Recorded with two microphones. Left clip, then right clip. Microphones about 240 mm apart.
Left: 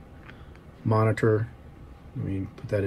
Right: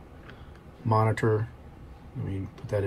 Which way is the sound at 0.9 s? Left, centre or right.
Centre.